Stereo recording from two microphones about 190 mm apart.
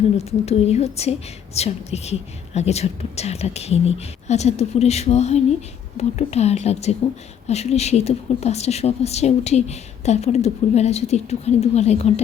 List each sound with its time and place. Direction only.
0.3 s speech: 35° left (ahead or behind)